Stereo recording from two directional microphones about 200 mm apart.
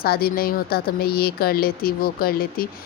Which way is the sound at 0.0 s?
50° left (ahead or behind).